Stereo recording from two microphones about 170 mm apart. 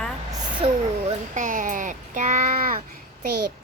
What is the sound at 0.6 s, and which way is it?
Speech, 40° right (ahead or behind).